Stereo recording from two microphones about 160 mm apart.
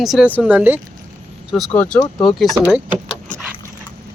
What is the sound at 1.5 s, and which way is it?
Speech, 5° left (ahead or behind).